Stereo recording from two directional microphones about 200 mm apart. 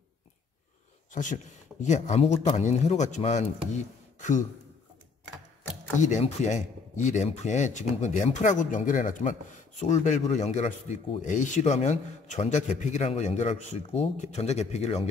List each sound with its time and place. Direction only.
1.1 s speech: 40° left (ahead or behind)
5.9 s speech: 35° left (ahead or behind)